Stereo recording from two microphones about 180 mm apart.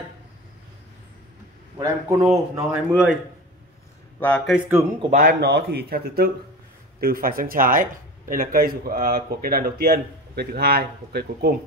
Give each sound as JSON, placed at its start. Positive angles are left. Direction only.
{"t": 1.8, "sound": "speech", "side_deg": -15}
{"t": 4.5, "sound": "speech", "side_deg": -10}
{"t": 5.1, "sound": "speech", "side_deg": -55}